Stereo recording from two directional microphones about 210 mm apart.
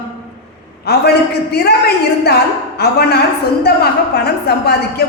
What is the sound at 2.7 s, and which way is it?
A woman's voice, 50° left (ahead or behind).